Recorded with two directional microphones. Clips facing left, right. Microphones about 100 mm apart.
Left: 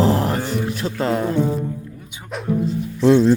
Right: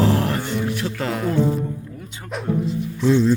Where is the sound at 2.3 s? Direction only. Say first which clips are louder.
Even; centre (ahead or behind).